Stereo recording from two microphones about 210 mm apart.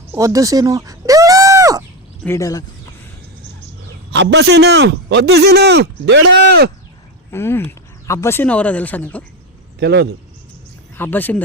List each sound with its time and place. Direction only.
0.1 s a sound: 15° right (ahead or behind)
2.2 s speech: 15° left (ahead or behind)
4.1 s a man's voice: 55° right (ahead or behind)
7.3 s speech: 10° left (ahead or behind)
9.8 s a man's voice: 55° right (ahead or behind)
10.9 s speech: 10° left (ahead or behind)